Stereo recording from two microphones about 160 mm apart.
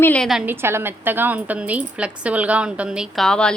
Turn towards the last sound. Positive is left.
turn(degrees=5)  # may be behind; listen again after turning